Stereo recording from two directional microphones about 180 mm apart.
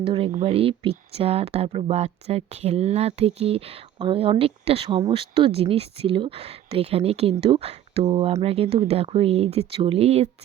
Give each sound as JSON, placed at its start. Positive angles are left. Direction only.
{"t": 0.0, "sound": "speech", "side_deg": -30}